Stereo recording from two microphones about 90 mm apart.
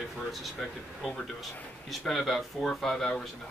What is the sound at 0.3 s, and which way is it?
Speech, centre (ahead or behind).